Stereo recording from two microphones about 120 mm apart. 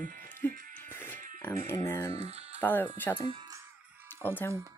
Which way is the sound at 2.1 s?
60° right (ahead or behind).